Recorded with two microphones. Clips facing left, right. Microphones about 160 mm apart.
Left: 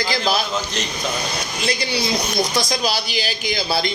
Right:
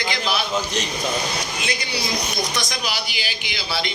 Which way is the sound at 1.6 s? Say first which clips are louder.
Left 4 dB; 30° left (ahead or behind).